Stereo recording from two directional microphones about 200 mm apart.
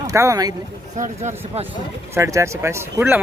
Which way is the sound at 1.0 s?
35° right (ahead or behind).